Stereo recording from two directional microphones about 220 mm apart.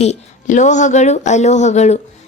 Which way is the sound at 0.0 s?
30° left (ahead or behind).